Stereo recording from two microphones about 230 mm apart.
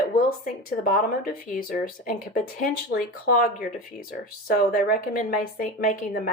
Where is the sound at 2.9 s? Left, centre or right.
Left.